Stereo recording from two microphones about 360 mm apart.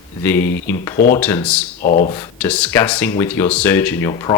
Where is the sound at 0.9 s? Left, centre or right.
Left.